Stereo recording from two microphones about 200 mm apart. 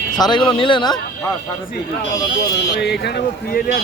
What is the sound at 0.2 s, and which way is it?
Speech, 20° left (ahead or behind).